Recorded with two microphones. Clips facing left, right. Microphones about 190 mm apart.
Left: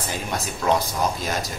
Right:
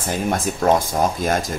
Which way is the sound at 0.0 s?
50° right (ahead or behind).